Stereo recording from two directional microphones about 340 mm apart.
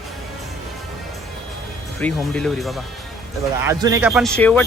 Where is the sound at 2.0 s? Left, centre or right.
Centre.